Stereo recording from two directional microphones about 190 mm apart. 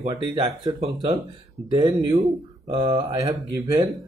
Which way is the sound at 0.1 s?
25° right (ahead or behind).